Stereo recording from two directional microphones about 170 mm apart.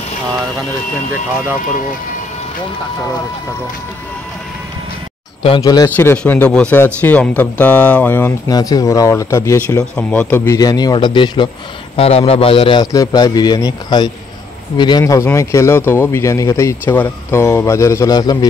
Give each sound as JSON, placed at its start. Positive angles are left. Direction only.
{"t": 5.6, "sound": "speech", "side_deg": 20}
{"t": 5.9, "sound": "speech", "side_deg": 10}
{"t": 8.5, "sound": "speech", "side_deg": 20}